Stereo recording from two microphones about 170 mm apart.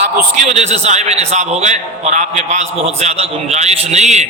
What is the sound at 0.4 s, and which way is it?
A man's voice, 40° right (ahead or behind).